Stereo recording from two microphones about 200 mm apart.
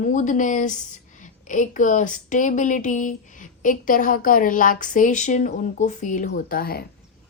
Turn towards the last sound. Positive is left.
turn(degrees=50)  # may be behind; listen again after turning